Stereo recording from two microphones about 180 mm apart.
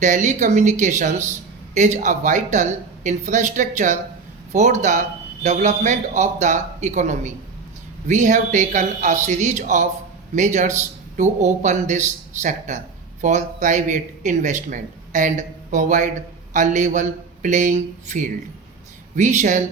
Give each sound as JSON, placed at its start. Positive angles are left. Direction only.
{"t": 0.0, "sound": "a man's voice", "side_deg": -45}